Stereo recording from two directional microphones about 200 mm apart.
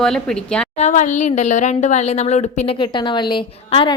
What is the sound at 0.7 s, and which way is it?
Speech, 35° left (ahead or behind).